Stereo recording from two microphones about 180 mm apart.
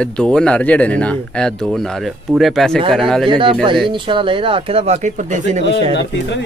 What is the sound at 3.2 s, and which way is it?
Speech, 25° right (ahead or behind).